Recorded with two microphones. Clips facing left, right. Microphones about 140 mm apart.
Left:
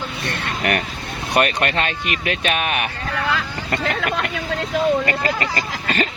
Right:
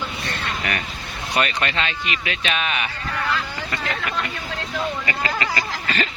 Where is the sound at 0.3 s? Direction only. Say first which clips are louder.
Left 6 dB; 60° left (ahead or behind).